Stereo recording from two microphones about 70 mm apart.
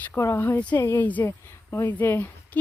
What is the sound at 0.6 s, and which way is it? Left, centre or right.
Speech, centre.